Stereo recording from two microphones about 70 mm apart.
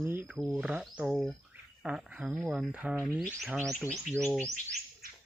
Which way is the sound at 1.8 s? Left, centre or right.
Centre.